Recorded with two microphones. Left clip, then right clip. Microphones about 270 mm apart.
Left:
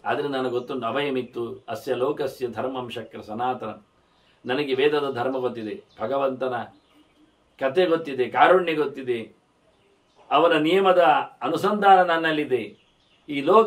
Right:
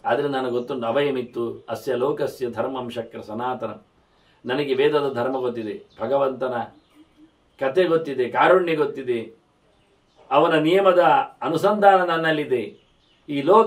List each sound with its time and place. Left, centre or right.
0.0 s a man's voice: centre
4.6 s a man's voice: centre
7.5 s a man's voice: centre
10.2 s a man's voice: centre